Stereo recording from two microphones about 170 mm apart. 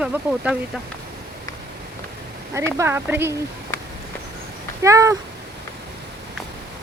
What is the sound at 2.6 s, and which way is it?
Speech, 15° right (ahead or behind).